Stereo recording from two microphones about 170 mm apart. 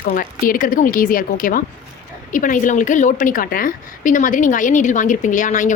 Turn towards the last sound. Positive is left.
turn(degrees=45)  # may be behind; listen again after turning